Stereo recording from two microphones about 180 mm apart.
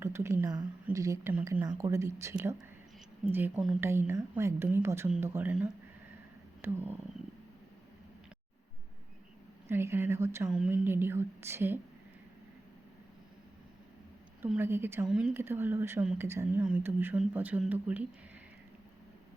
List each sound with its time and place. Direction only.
0.0 s a woman's voice: 15° right (ahead or behind)
1.6 s a woman's voice: 20° right (ahead or behind)
9.6 s a woman's voice: 15° right (ahead or behind)
14.4 s a woman's voice: 10° right (ahead or behind)